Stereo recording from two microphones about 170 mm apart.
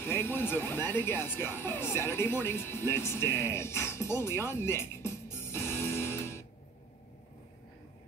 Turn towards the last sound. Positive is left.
turn(degrees=15)  # may be behind; listen again after turning